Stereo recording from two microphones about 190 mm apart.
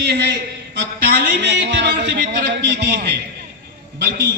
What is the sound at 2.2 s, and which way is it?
Speech, 60° right (ahead or behind).